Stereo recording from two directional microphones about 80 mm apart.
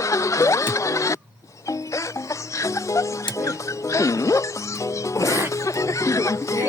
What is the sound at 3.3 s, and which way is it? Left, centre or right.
Music, left.